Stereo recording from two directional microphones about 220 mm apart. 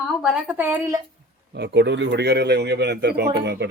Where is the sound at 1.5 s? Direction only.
50° right (ahead or behind).